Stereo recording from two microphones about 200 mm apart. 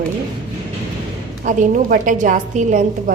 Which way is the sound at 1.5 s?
40° right (ahead or behind).